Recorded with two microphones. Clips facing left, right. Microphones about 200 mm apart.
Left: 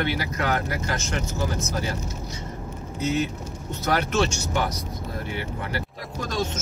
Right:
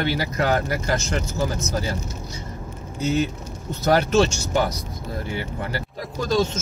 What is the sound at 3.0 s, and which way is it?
Speech, 30° right (ahead or behind).